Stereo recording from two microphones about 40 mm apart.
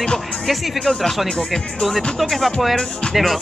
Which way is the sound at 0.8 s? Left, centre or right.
Centre.